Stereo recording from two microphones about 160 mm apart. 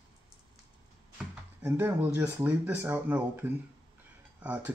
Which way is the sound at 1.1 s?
15° right (ahead or behind).